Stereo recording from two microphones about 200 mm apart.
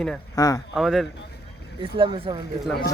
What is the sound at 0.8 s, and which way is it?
Speech, centre (ahead or behind).